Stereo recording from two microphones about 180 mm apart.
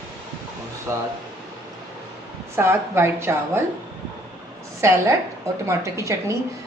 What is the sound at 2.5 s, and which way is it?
Speech, 15° right (ahead or behind).